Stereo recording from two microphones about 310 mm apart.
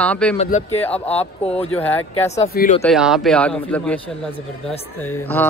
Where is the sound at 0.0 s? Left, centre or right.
Centre.